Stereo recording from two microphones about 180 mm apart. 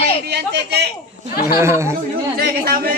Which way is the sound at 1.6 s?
15° right (ahead or behind).